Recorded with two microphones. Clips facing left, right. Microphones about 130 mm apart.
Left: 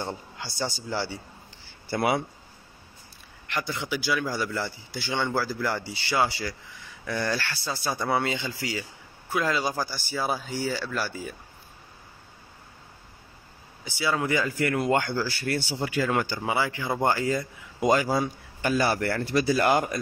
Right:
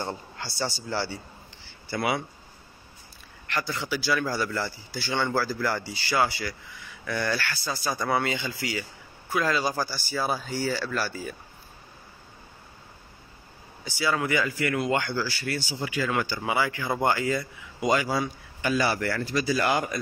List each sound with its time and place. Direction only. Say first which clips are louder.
0.1 s speech: right 1 dB; 15° left (ahead or behind)
1.9 s a man's voice: left 3 dB; 45° left (ahead or behind)
3.4 s a man's voice: even; 20° left (ahead or behind)
9.3 s a man's voice: right 1 dB; 20° left (ahead or behind)
13.8 s a man's voice: even; 20° left (ahead or behind)
14.3 s speech: left 1 dB; 35° left (ahead or behind)
14.9 s a man's voice: left 2 dB; 45° left (ahead or behind)
16.3 s a man's voice: even; 25° left (ahead or behind); by 19.2 s 45° left (ahead or behind)
19.2 s a man's voice: left 4 dB; 60° left (ahead or behind)